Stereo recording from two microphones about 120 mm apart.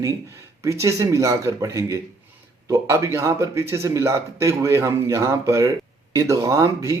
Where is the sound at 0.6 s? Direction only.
25° right (ahead or behind).